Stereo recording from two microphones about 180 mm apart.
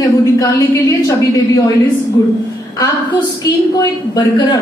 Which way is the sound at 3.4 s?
20° left (ahead or behind).